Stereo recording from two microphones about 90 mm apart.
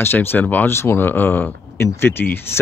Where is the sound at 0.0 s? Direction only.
25° left (ahead or behind).